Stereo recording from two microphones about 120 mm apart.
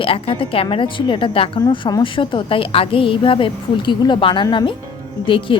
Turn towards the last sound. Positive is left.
turn(degrees=45)  # may be behind; listen again after turning